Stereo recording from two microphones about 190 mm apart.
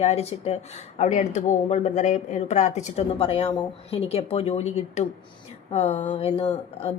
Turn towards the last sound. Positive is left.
turn(degrees=35)  # may be behind; listen again after turning